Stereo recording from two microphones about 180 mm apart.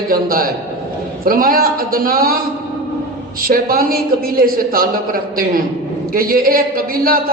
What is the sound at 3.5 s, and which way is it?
A man's voice, 55° right (ahead or behind).